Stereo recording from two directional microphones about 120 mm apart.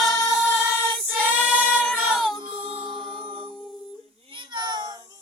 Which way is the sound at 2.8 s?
45° right (ahead or behind).